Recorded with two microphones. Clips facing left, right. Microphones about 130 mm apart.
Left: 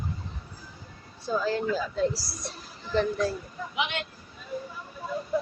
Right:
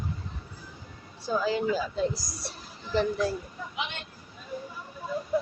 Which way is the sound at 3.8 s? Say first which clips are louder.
Left 6 dB; 90° left.